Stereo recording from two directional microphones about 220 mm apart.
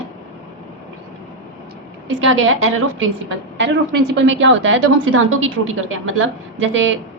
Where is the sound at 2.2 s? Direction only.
65° right (ahead or behind).